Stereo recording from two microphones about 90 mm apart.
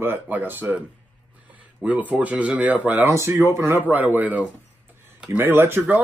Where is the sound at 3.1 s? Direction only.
30° right (ahead or behind).